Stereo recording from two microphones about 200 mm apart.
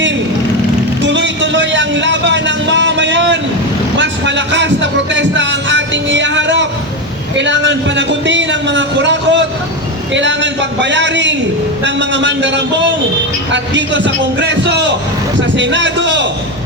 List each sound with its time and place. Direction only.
1.0 s a sound: 65° right (ahead or behind)
3.9 s music: 65° right (ahead or behind)
7.3 s a man's voice: 65° right (ahead or behind)